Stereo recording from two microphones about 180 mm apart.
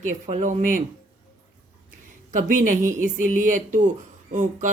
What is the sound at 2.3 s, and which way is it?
Speech, 45° right (ahead or behind).